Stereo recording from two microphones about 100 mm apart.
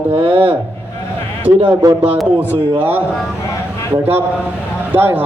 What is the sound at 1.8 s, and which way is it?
Speech, 30° right (ahead or behind).